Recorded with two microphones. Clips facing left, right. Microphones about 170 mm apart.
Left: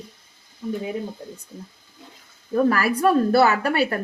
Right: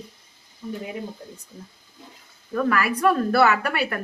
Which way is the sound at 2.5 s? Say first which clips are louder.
Left 3 dB; 35° left (ahead or behind).